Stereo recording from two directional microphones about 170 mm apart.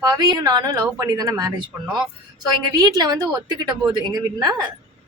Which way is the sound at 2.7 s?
25° right (ahead or behind).